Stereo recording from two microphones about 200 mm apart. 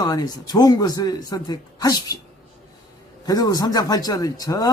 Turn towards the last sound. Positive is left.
turn(degrees=15)  # may be behind; listen again after turning